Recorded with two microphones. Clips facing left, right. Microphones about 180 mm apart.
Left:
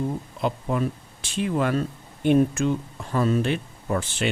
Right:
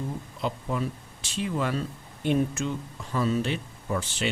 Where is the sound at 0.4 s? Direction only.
55° left (ahead or behind).